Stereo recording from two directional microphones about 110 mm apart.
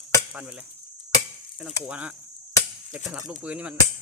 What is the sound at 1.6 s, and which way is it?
Speech, 10° right (ahead or behind).